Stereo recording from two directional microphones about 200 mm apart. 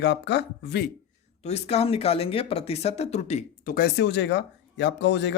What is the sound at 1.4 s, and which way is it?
Speech, 30° left (ahead or behind).